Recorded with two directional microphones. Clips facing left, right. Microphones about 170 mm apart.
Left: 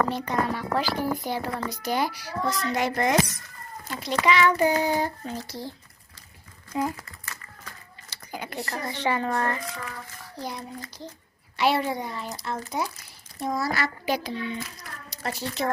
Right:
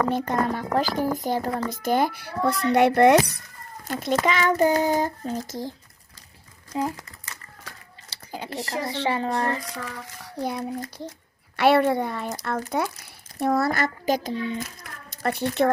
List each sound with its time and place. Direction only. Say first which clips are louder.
0.1 s speech: right 3 dB; 50° right (ahead or behind); by 3.4 s 65° right (ahead or behind)
3.8 s speech: right 1 dB; 45° right (ahead or behind)
6.7 s speech: right 1 dB; 25° right (ahead or behind)
8.1 s a sound: right 1 dB; 30° right (ahead or behind)
8.6 s speech: right 2 dB; 20° right (ahead or behind)
10.4 s a child's voice: right 7 dB; 55° right (ahead or behind)